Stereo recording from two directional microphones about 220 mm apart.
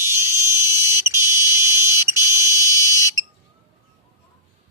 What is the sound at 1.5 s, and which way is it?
Fire alarm, 10° right (ahead or behind).